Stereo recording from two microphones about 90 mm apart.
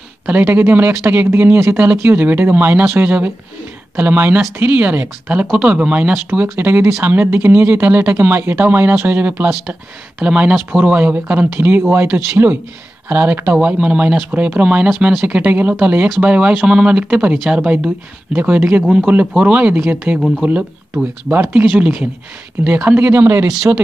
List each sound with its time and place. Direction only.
0.3 s speech: 20° right (ahead or behind)
9.5 s speech: 5° right (ahead or behind)
12.1 s speech: 30° right (ahead or behind)
20.2 s speech: 5° left (ahead or behind)
21.3 s speech: 20° right (ahead or behind)
23.4 s speech: 5° right (ahead or behind)